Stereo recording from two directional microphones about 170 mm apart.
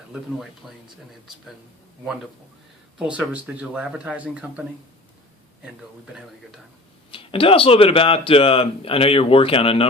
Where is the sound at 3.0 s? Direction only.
5° right (ahead or behind).